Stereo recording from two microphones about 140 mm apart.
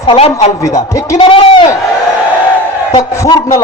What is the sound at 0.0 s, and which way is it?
Speech, 40° left (ahead or behind).